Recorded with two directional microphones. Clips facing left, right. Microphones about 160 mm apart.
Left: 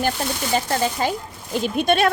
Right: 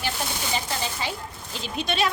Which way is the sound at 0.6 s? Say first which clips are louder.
Left 8 dB; 50° left (ahead or behind).